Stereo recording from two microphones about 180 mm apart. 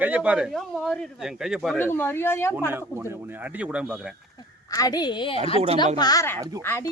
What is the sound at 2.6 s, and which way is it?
Speech, 10° right (ahead or behind).